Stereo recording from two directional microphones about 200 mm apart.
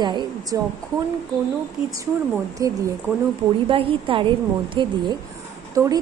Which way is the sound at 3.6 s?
25° right (ahead or behind).